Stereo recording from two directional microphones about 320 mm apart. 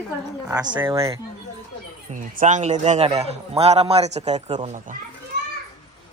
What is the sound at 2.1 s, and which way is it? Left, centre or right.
A man's voice, right.